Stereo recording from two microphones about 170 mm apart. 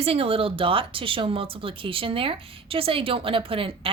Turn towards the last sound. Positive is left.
turn(degrees=-30)  # may be behind; listen again after turning